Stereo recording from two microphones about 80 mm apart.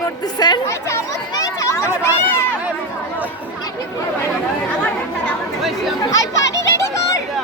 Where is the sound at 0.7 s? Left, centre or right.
Left.